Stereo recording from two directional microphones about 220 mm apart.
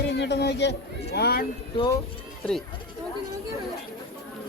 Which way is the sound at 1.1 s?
45° left (ahead or behind).